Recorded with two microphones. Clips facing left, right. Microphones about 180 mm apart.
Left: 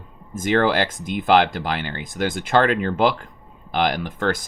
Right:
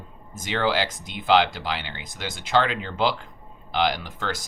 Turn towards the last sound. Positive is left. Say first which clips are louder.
# left 8 dB
turn(degrees=55)  # may be behind; listen again after turning